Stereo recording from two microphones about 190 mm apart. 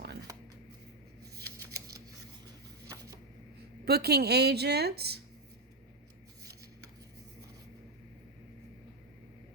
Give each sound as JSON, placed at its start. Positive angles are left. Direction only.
{"t": 0.3, "sound": "shuffling cards", "side_deg": -20}
{"t": 2.9, "sound": "a sound", "side_deg": -20}
{"t": 3.8, "sound": "a woman's voice", "side_deg": -55}